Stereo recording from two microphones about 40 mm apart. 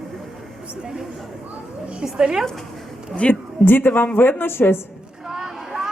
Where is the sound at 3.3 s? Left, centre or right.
Left.